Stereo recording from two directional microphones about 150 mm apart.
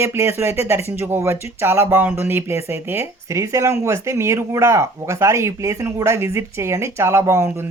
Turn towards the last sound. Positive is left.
turn(degrees=-20)  # may be behind; listen again after turning